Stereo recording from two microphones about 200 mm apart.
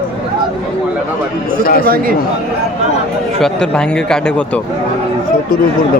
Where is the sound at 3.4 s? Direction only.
5° left (ahead or behind).